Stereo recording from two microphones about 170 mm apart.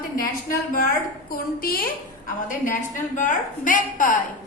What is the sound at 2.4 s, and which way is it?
A woman's voice, 50° left (ahead or behind).